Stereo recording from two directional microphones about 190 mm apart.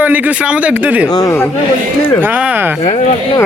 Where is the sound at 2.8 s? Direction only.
35° left (ahead or behind).